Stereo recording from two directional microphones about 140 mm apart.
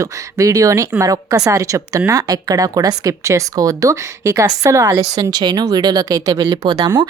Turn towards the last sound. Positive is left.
turn(degrees=-30)  # may be behind; listen again after turning